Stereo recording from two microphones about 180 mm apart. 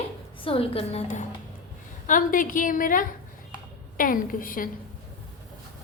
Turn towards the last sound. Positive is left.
turn(degrees=50)  # may be behind; listen again after turning